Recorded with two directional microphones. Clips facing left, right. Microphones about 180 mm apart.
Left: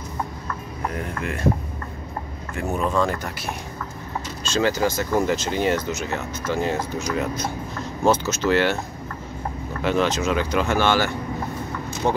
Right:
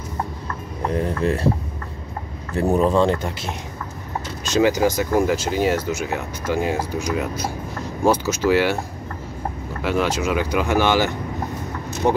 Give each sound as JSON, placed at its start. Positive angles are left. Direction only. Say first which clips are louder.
{"t": 0.9, "sound": "a sound", "louder": "right 11 dB", "side_deg": -35}
{"t": 2.5, "sound": "speech", "louder": "right 6 dB", "side_deg": -35}
{"t": 9.8, "sound": "speech", "louder": "even", "side_deg": -10}